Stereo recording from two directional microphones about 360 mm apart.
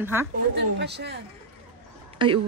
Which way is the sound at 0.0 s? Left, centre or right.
Centre.